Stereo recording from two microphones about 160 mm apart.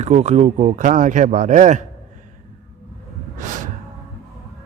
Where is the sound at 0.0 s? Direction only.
45° right (ahead or behind).